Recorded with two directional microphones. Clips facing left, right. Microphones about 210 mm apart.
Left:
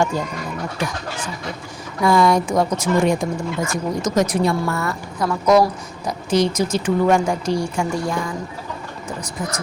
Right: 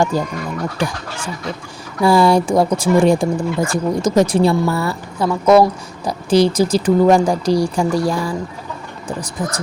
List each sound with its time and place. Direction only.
0.1 s speech: 35° right (ahead or behind)